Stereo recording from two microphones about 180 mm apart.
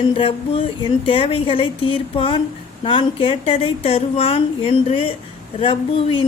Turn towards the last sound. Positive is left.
turn(degrees=30)  # may be behind; listen again after turning